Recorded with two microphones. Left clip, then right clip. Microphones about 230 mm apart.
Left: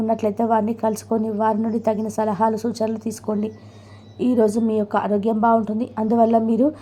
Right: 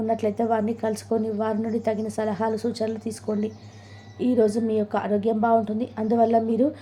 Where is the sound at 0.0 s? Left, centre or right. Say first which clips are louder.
Left 3 dB; centre.